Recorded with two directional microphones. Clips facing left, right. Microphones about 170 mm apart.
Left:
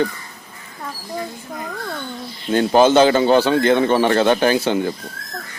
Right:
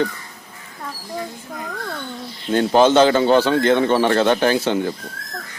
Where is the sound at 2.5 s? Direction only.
10° left (ahead or behind).